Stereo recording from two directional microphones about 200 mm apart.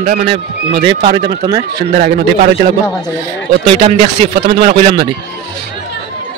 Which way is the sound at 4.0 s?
45° right (ahead or behind).